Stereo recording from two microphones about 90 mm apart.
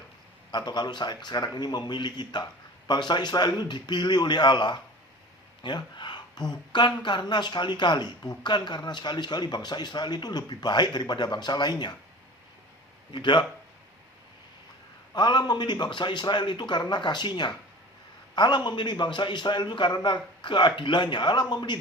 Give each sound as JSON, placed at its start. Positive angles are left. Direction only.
{"t": 0.5, "sound": "speech", "side_deg": 55}
{"t": 13.1, "sound": "speech", "side_deg": 60}
{"t": 15.1, "sound": "speech", "side_deg": 55}